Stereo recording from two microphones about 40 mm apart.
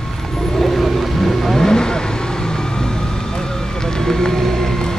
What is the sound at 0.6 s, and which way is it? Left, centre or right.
Vehicle, centre.